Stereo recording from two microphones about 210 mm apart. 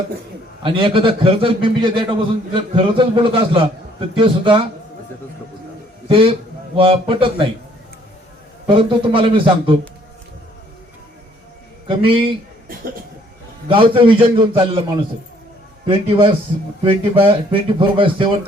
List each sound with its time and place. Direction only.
0.6 s a man's voice: 25° right (ahead or behind)
6.1 s a man's voice: 25° right (ahead or behind)
8.6 s a man's voice: 25° right (ahead or behind)
13.7 s a man's voice: 25° right (ahead or behind)